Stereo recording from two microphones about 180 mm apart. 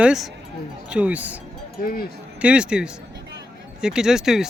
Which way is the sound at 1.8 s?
55° left (ahead or behind).